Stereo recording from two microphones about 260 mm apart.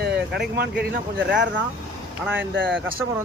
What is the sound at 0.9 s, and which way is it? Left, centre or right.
Speech, right.